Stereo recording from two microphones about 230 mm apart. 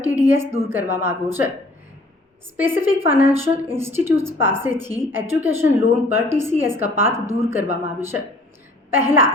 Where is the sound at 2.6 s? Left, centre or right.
Centre.